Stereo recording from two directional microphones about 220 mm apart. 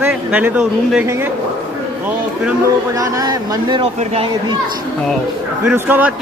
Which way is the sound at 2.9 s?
15° right (ahead or behind).